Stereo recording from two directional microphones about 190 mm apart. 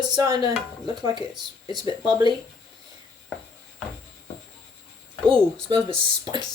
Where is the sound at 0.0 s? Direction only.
20° right (ahead or behind).